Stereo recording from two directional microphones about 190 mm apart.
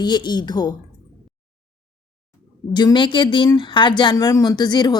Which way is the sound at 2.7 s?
25° left (ahead or behind).